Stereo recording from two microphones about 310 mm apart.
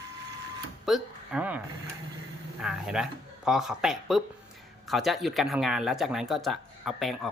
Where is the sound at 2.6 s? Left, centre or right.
Centre.